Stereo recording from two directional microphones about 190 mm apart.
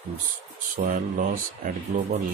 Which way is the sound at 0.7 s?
45° right (ahead or behind).